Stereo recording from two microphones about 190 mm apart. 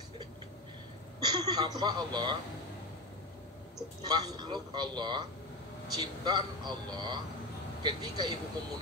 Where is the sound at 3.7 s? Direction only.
20° right (ahead or behind).